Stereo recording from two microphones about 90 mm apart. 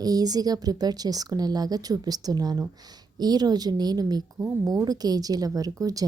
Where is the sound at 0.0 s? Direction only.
45° right (ahead or behind).